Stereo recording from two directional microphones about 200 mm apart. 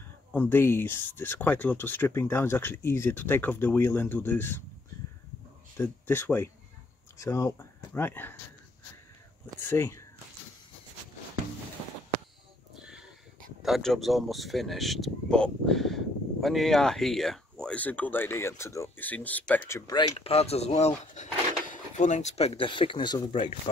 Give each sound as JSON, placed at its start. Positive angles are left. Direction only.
{"t": 0.3, "sound": "speech", "side_deg": 10}
{"t": 5.8, "sound": "speech", "side_deg": 10}
{"t": 9.6, "sound": "speech", "side_deg": 10}
{"t": 12.7, "sound": "a sound", "side_deg": -5}
{"t": 13.6, "sound": "speech", "side_deg": 0}
{"t": 19.9, "sound": "speech", "side_deg": 25}